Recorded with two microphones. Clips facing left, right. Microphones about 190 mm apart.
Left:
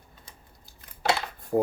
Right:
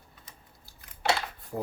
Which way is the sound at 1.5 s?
50° left (ahead or behind).